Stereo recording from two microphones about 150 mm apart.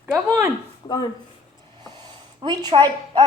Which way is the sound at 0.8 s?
25° left (ahead or behind).